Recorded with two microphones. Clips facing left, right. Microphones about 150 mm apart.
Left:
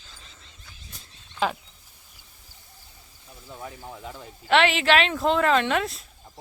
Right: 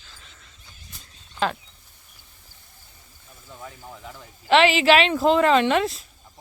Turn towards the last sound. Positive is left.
turn(degrees=0)  # may be behind; listen again after turning